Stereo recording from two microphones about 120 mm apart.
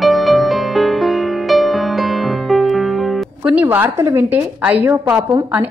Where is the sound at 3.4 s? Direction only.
15° right (ahead or behind).